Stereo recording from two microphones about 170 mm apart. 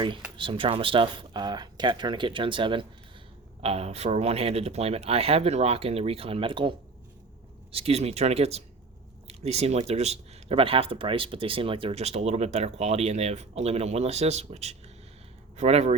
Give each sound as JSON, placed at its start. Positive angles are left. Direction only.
{"t": 0.3, "sound": "speech", "side_deg": -30}